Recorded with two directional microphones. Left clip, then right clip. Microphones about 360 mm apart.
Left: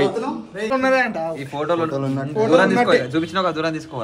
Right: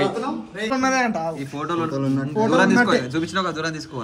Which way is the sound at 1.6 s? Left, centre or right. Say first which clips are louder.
Left 3 dB; centre.